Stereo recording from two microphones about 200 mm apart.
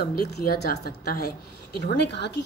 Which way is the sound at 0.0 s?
50° left (ahead or behind).